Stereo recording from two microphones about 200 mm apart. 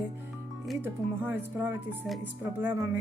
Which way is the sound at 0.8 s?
10° right (ahead or behind).